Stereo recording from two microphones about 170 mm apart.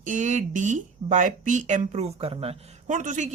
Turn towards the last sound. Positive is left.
turn(degrees=-45)  # may be behind; listen again after turning